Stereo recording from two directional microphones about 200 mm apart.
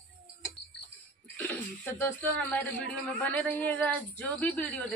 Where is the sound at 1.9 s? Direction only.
10° left (ahead or behind).